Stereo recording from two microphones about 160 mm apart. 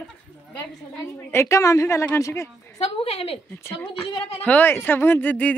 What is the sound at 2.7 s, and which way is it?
Speech, 40° left (ahead or behind).